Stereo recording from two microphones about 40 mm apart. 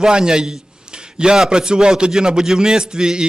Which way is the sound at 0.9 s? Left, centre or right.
Right.